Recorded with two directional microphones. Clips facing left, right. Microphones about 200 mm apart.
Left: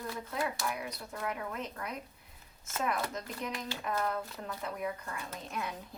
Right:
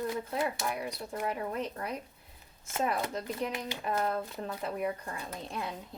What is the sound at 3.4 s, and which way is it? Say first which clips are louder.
Speech: right 4 dB; 25° right (ahead or behind).